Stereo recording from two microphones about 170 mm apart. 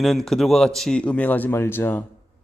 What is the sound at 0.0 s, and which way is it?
A man's voice, centre (ahead or behind).